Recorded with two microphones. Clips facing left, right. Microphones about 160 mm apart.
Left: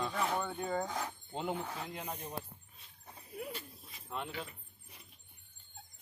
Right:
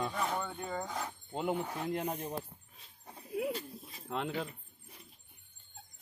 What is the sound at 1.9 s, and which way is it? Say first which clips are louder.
Speech: right 8 dB; 45° right (ahead or behind).